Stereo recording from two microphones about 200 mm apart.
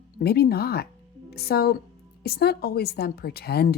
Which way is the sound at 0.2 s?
50° left (ahead or behind).